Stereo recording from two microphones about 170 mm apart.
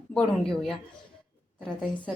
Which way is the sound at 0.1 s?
5° left (ahead or behind).